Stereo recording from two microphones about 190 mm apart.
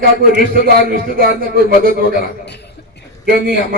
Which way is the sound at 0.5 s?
50° right (ahead or behind).